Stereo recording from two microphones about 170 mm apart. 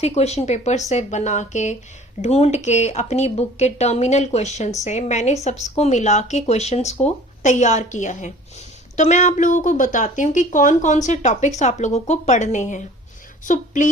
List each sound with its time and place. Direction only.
0.0 s a woman's voice: 40° left (ahead or behind)